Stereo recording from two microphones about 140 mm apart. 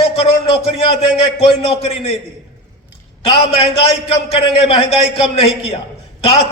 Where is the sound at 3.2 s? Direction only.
45° left (ahead or behind).